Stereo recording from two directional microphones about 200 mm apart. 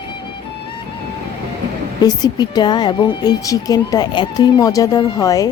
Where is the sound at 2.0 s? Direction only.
20° left (ahead or behind).